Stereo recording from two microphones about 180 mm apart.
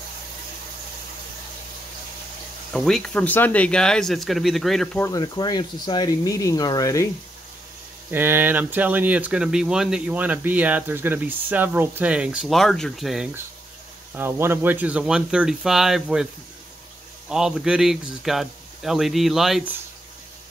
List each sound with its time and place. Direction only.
2.7 s speech: centre (ahead or behind)
5.0 s speech: 20° left (ahead or behind)
8.1 s speech: 10° right (ahead or behind)
14.1 s speech: 15° right (ahead or behind)
17.3 s speech: 5° right (ahead or behind)